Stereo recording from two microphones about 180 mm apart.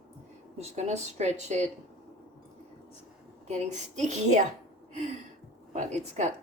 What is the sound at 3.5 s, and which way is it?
Speech, 40° right (ahead or behind).